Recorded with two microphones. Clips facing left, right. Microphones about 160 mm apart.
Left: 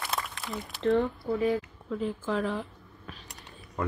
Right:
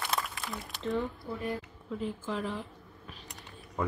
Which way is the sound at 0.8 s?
75° left (ahead or behind).